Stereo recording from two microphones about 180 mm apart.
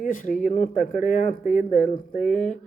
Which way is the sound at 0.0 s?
50° left (ahead or behind).